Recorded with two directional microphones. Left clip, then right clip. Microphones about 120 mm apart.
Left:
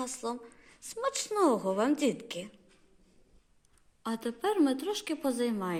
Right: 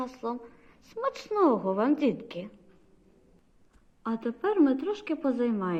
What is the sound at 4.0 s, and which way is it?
A woman's voice, 35° left (ahead or behind).